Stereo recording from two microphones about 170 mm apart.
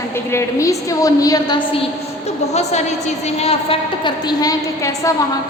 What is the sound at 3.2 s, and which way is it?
A woman's voice, 40° left (ahead or behind).